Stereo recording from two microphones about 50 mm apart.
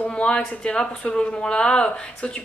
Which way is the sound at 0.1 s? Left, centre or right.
Centre.